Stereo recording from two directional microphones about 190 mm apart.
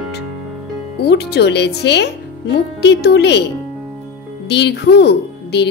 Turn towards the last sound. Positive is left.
turn(degrees=60)  # may be behind; listen again after turning